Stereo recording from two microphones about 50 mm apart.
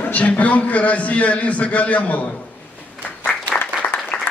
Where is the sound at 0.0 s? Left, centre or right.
Left.